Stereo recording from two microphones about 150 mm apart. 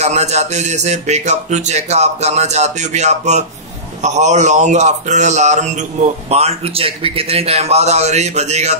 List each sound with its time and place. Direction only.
0.0 s speech: 45° right (ahead or behind)